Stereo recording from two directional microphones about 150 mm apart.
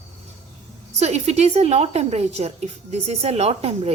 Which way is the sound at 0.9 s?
45° right (ahead or behind).